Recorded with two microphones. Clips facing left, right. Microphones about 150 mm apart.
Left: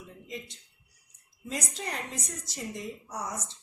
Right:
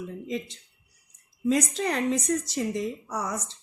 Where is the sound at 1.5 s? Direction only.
90° right.